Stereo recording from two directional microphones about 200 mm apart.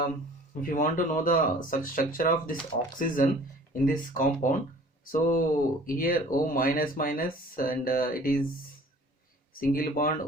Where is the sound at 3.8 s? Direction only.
40° left (ahead or behind).